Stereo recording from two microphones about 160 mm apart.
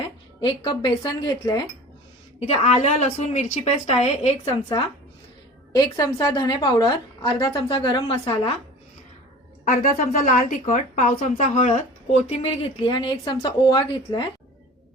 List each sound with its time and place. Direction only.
0.4 s a woman's voice: 30° left (ahead or behind)
2.4 s a woman's voice: 40° left (ahead or behind)
5.7 s a woman's voice: 25° left (ahead or behind)
9.6 s a woman's voice: 55° left (ahead or behind); by 14.3 s 25° left (ahead or behind)